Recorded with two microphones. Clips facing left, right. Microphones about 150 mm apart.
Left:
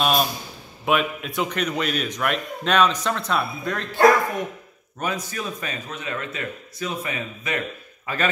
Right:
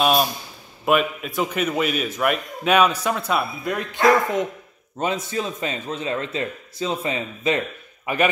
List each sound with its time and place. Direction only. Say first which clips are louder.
0.8 s a man's voice: right 2 dB; centre (ahead or behind); by 8.2 s 20° right (ahead or behind)